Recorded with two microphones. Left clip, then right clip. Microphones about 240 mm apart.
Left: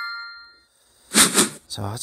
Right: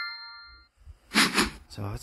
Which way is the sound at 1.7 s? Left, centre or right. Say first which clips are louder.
Left 8 dB; centre.